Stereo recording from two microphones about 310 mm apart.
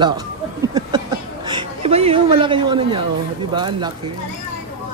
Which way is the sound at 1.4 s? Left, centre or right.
Centre.